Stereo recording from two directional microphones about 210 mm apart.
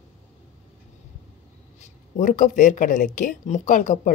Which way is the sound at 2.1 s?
35° left (ahead or behind).